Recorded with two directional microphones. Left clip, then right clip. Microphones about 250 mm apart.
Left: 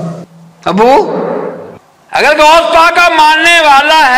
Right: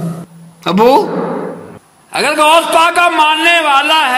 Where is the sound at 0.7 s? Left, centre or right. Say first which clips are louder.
Left 2 dB; right.